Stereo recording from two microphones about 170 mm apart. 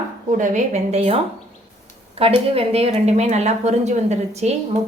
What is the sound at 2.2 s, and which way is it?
A woman's voice, 35° right (ahead or behind).